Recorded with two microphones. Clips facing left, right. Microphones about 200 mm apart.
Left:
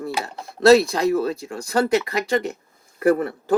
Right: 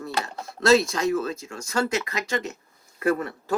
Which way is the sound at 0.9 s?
35° left (ahead or behind).